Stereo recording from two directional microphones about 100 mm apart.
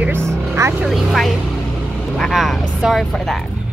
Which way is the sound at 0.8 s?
Centre (ahead or behind).